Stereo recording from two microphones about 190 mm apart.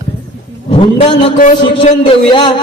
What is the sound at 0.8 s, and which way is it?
A woman's voice, 30° left (ahead or behind).